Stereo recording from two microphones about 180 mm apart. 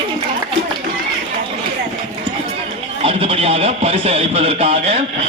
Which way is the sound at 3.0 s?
30° right (ahead or behind).